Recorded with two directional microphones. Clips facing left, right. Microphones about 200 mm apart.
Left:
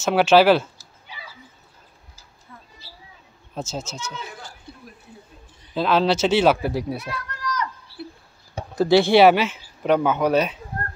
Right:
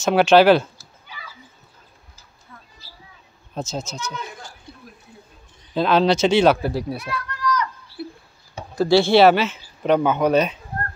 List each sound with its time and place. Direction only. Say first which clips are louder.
0.0 s speech: right 2 dB; 5° left (ahead or behind)
1.0 s a sound: even; 30° left (ahead or behind)
3.5 s speech: right 2 dB; 5° left (ahead or behind)
5.8 s speech: right 2 dB; 5° left (ahead or behind); by 7.2 s 20° left (ahead or behind)
8.7 s speech: even; 20° left (ahead or behind)